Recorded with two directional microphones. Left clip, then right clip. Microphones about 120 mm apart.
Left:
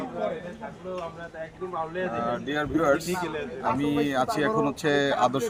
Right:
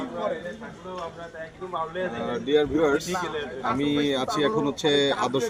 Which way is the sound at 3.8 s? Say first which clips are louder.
Right 1 dB; 40° left (ahead or behind).